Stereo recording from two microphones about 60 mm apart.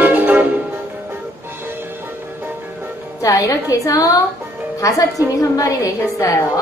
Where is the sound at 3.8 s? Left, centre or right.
Left.